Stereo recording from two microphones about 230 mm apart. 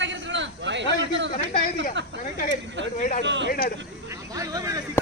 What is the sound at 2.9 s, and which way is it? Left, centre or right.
Speech, left.